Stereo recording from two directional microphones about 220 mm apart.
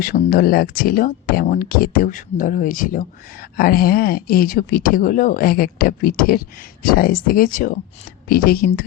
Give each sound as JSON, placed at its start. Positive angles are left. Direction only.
{"t": 0.0, "sound": "speech", "side_deg": 40}